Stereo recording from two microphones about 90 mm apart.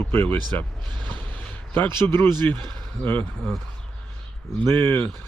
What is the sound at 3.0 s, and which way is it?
Speech, 20° left (ahead or behind).